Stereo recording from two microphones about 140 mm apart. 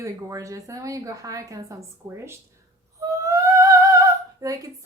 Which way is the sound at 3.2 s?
25° right (ahead or behind).